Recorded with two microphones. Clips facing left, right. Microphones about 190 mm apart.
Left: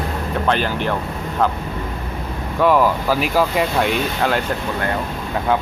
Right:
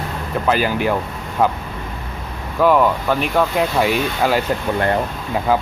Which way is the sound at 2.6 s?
Centre (ahead or behind).